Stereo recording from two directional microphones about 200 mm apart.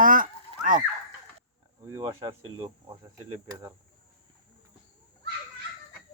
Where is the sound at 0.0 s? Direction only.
45° right (ahead or behind).